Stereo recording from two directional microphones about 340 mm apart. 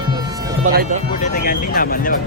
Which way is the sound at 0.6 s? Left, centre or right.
Right.